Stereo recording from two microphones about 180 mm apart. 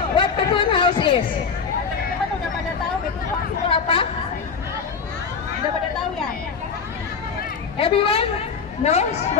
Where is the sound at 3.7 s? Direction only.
30° left (ahead or behind).